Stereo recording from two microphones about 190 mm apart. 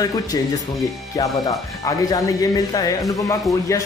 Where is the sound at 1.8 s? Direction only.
15° left (ahead or behind).